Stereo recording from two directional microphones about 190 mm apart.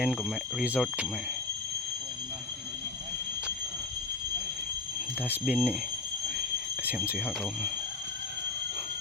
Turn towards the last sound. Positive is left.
turn(degrees=0)  # may be behind; listen again after turning